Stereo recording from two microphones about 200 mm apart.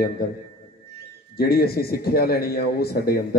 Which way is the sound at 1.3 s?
50° left (ahead or behind).